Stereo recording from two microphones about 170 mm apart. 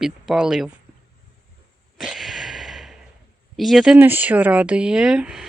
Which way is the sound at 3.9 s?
10° right (ahead or behind).